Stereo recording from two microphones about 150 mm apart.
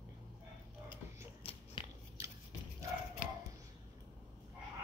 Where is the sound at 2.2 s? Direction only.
20° right (ahead or behind).